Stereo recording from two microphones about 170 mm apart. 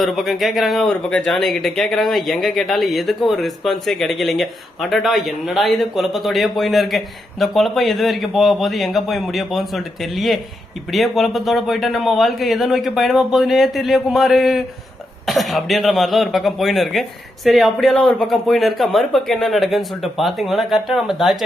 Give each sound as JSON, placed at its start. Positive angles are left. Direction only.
{"t": 0.0, "sound": "speech", "side_deg": 0}